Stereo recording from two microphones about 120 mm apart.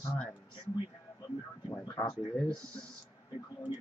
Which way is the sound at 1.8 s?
35° left (ahead or behind).